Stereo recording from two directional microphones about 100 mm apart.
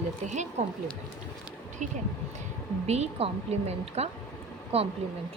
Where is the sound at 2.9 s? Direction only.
85° right.